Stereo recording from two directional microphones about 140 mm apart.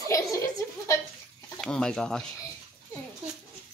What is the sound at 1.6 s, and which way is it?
Speech, 5° left (ahead or behind).